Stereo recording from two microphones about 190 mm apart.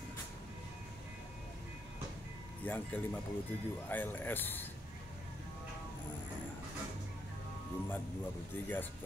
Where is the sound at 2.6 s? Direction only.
10° left (ahead or behind).